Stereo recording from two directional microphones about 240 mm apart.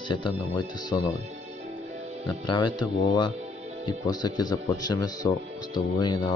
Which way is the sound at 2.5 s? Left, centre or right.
Centre.